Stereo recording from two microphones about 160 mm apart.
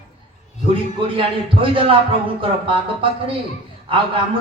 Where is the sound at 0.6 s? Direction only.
35° right (ahead or behind).